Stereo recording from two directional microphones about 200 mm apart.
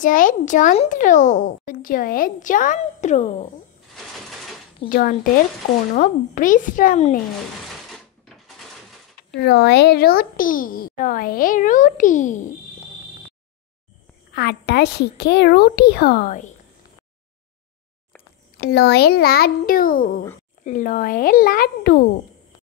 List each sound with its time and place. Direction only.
0.0 s speech: 40° left (ahead or behind)
4.8 s a child's voice: 45° left (ahead or behind)
7.9 s a sound: centre (ahead or behind)
9.3 s a child's voice: 55° left (ahead or behind); by 12.4 s 40° left (ahead or behind)
14.3 s a woman's voice: 55° left (ahead or behind)
18.7 s a child's voice: 55° left (ahead or behind)